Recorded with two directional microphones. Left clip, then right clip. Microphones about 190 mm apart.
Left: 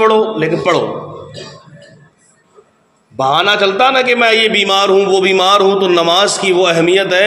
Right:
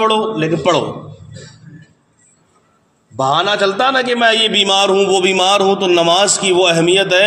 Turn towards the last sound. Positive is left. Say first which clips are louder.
# left 1 dB
turn(degrees=-45)  # may be behind; listen again after turning